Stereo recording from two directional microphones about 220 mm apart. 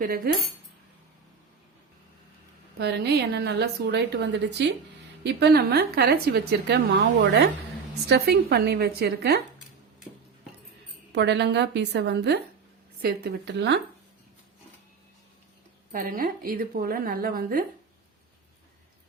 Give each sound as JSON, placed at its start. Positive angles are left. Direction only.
{"t": 0.0, "sound": "a woman's voice", "side_deg": -40}
{"t": 2.7, "sound": "a woman's voice", "side_deg": -50}
{"t": 8.0, "sound": "a woman's voice", "side_deg": -50}
{"t": 11.1, "sound": "a woman's voice", "side_deg": -50}
{"t": 15.9, "sound": "a woman's voice", "side_deg": -40}